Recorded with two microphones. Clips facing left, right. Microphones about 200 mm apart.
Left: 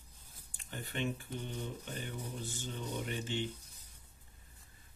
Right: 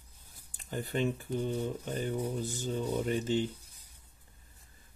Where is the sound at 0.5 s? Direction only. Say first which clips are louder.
Right 8 dB; 40° right (ahead or behind).